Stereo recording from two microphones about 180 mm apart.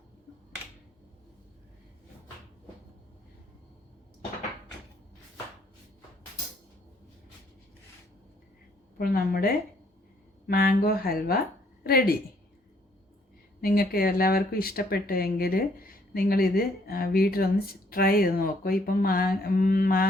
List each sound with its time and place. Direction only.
9.0 s speech: 55° left (ahead or behind)
13.6 s speech: 55° left (ahead or behind)